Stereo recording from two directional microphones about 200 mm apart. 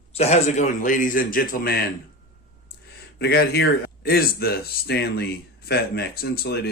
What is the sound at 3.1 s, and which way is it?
Speech, 55° left (ahead or behind).